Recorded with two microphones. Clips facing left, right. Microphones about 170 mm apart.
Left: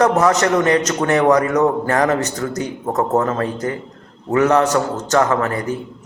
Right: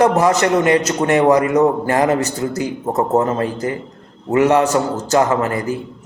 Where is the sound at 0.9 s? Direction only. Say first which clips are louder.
Right 1 dB; 25° right (ahead or behind).